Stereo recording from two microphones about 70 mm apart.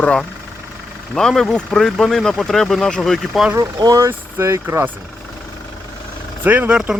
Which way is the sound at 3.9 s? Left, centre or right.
Right.